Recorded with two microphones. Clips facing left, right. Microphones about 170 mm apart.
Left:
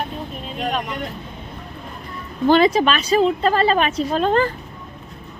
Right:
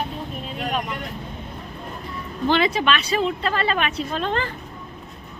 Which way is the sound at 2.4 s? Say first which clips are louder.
Left 5 dB; 40° left (ahead or behind).